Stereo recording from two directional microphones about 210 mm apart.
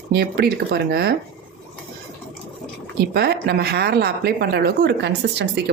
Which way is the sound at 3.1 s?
50° right (ahead or behind).